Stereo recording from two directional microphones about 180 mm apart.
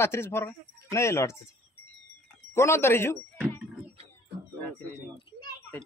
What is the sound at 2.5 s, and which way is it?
Speech, 15° left (ahead or behind).